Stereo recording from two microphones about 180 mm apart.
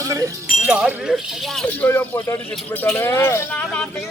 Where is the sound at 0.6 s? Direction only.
5° right (ahead or behind).